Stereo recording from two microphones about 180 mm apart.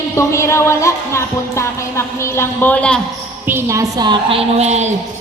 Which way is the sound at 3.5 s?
15° right (ahead or behind).